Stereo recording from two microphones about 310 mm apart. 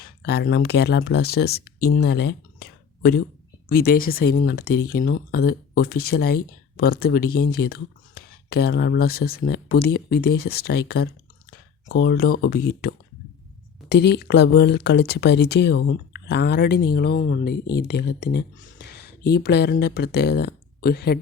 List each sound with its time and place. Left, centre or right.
0.2 s speech: left
13.9 s speech: left